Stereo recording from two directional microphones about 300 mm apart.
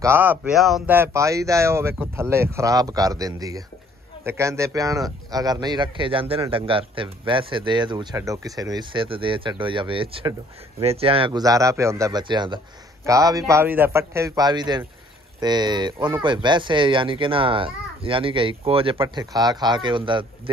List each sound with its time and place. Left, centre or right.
0.0 s speech: centre